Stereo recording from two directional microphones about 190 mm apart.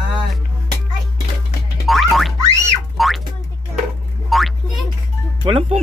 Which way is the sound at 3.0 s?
Centre (ahead or behind).